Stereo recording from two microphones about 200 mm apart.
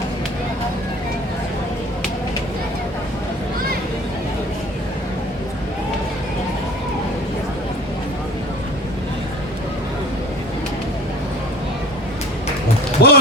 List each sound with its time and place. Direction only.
13.0 s heart sounds: 50° left (ahead or behind)